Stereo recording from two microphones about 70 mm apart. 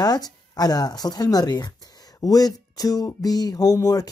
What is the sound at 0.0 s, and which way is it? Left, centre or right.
Speech, left.